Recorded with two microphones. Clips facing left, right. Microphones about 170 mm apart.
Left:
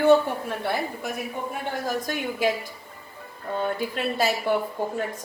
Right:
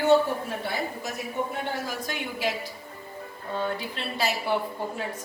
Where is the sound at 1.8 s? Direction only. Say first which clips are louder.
Left 5 dB; 45° left (ahead or behind).